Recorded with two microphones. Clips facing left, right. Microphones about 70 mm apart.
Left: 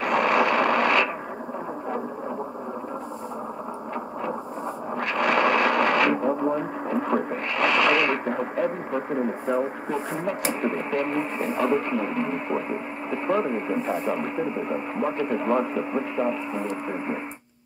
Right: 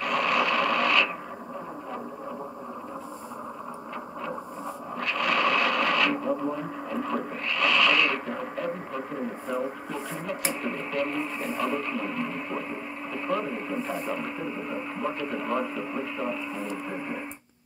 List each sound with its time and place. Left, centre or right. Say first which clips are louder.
0.0 s radio: left 4 dB; left
4.9 s speech: left 4 dB; left